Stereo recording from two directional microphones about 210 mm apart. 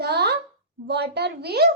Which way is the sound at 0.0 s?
50° right (ahead or behind).